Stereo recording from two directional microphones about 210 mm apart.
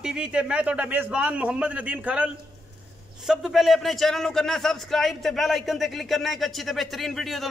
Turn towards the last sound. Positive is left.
turn(degrees=0)  # may be behind; listen again after turning